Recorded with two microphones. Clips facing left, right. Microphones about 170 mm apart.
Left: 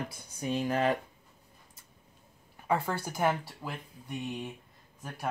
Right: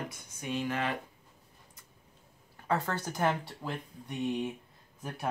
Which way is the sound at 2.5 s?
10° left (ahead or behind).